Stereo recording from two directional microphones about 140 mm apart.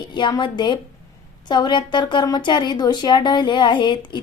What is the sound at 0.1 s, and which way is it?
A woman's voice, 30° left (ahead or behind).